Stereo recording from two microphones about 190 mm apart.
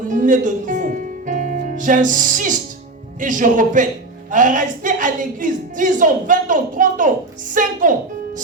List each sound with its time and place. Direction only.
0.1 s music: 45° right (ahead or behind)
3.2 s a woman's voice: 45° right (ahead or behind)